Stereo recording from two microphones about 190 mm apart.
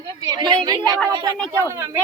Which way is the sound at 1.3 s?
10° left (ahead or behind).